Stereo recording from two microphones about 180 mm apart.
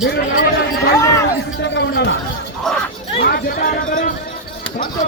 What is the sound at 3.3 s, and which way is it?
Speech, 60° left (ahead or behind).